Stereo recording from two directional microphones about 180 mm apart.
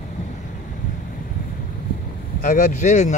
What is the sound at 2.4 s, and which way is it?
Speech, 50° left (ahead or behind).